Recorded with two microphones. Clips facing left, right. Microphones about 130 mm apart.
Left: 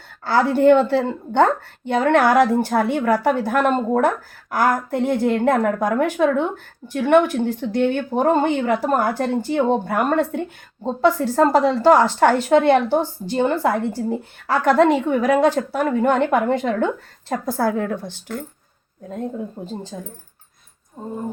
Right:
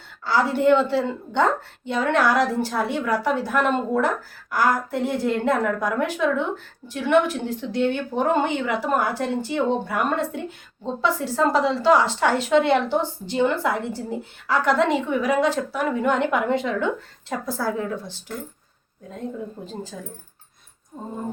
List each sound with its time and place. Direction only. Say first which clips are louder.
0.3 s a woman's voice: left 4 dB; 50° left (ahead or behind)
19.6 s speech: left 3 dB; 25° left (ahead or behind)